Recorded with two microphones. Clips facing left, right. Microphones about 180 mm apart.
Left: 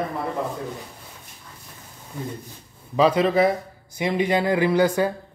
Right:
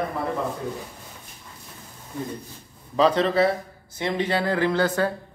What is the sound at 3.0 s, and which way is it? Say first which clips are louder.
Speech: left 1 dB; 10° left (ahead or behind).